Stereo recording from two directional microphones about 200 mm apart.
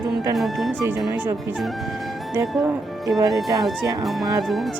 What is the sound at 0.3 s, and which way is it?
Music, centre (ahead or behind).